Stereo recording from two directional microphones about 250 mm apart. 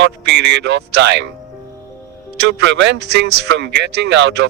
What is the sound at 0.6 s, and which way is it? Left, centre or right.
Speech, right.